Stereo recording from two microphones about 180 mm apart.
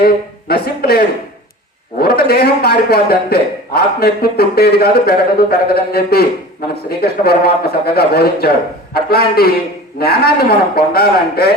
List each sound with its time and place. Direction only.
0.0 s a man's voice: 60° left (ahead or behind)